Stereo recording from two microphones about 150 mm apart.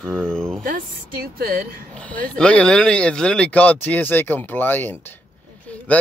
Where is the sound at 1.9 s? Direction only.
10° left (ahead or behind).